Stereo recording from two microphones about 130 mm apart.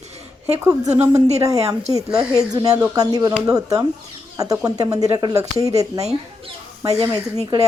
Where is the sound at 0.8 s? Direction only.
55° right (ahead or behind).